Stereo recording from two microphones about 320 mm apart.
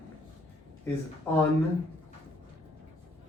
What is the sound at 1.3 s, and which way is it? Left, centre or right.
Speech, centre.